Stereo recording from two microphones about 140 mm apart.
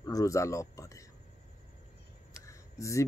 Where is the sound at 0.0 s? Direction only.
25° left (ahead or behind).